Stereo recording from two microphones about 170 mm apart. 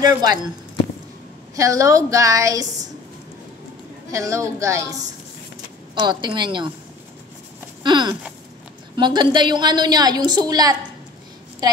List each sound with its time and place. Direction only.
0.0 s a woman's voice: 20° right (ahead or behind)
1.5 s a woman's voice: 20° right (ahead or behind)
4.1 s a woman's voice: 20° right (ahead or behind)
7.8 s a sound: 25° right (ahead or behind)
8.9 s a woman's voice: 25° right (ahead or behind)